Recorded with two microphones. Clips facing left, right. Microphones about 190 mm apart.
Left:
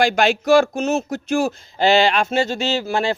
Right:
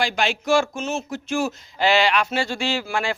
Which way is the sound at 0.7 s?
40° left (ahead or behind).